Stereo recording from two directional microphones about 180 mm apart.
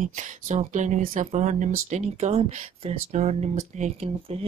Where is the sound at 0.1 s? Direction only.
40° right (ahead or behind).